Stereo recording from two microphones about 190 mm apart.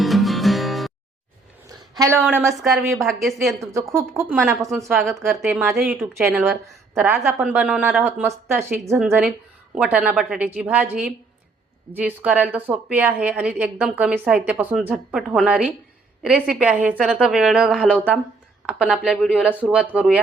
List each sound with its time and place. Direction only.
0.0 s music: centre (ahead or behind)
2.0 s a woman's voice: 15° right (ahead or behind)
2.4 s a woman's voice: centre (ahead or behind)
3.6 s a woman's voice: 15° right (ahead or behind)
4.9 s a woman's voice: centre (ahead or behind)
6.1 s a woman's voice: 15° right (ahead or behind)